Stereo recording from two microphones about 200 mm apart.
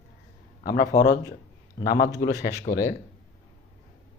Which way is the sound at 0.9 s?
15° left (ahead or behind).